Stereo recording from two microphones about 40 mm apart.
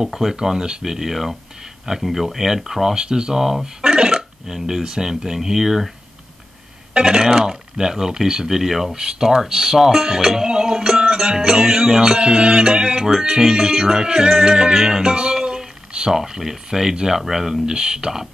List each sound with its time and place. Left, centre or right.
0.0 s speech: centre
3.3 s speech: centre
7.1 s speech: centre
8.9 s speech: centre
15.4 s a sound: right
16.1 s speech: centre
17.2 s speech: centre